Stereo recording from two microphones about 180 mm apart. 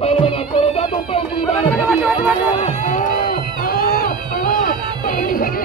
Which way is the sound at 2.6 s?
40° left (ahead or behind).